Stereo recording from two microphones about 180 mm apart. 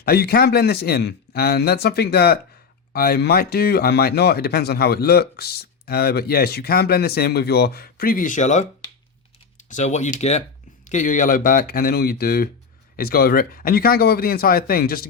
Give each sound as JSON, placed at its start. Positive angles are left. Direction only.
{"t": 0.0, "sound": "speech", "side_deg": 60}
{"t": 9.6, "sound": "speech", "side_deg": 40}